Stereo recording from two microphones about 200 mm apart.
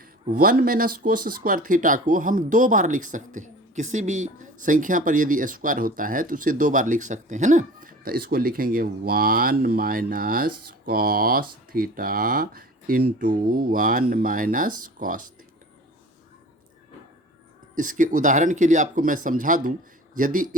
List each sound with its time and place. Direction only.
0.0 s speech: 45° right (ahead or behind)
17.7 s speech: 40° right (ahead or behind)